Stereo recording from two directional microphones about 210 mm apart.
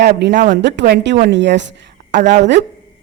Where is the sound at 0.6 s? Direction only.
55° right (ahead or behind).